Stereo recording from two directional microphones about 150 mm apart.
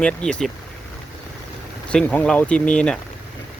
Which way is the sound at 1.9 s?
10° left (ahead or behind).